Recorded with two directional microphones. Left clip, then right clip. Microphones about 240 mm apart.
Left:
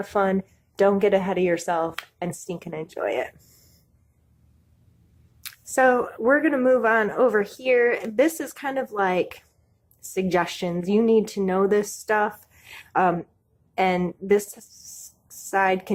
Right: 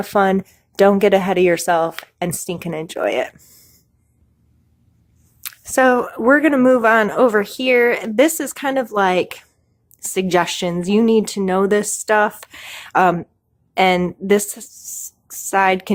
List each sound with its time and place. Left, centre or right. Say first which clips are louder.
0.0 s speech: right 7 dB; right
5.4 s a woman's voice: right 5 dB; right